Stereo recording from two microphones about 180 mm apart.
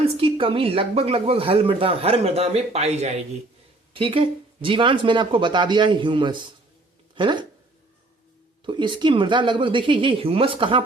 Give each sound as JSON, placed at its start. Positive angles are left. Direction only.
{"t": 0.0, "sound": "speech", "side_deg": -30}
{"t": 8.6, "sound": "speech", "side_deg": -25}